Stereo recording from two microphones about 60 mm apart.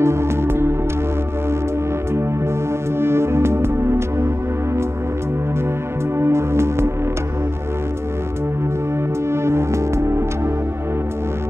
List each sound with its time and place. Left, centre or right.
0.0 s music: right
3.0 s music: right
6.1 s music: right
9.3 s music: right